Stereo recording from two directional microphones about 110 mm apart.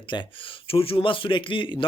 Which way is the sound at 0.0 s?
45° left (ahead or behind).